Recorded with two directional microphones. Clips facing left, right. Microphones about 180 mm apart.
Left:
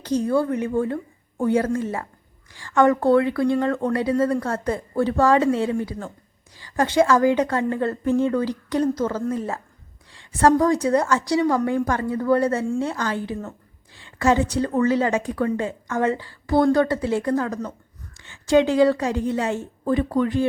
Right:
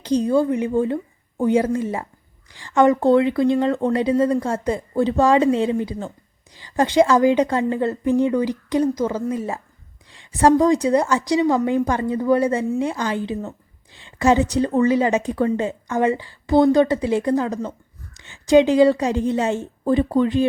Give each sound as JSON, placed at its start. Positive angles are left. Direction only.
{"t": 0.0, "sound": "a woman's voice", "side_deg": -15}